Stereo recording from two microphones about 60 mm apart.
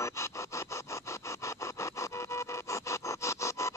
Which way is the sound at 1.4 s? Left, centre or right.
Left.